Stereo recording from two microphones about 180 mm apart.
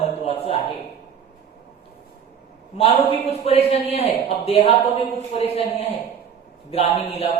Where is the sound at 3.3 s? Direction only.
35° left (ahead or behind).